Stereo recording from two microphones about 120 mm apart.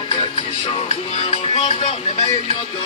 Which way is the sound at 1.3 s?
50° left (ahead or behind).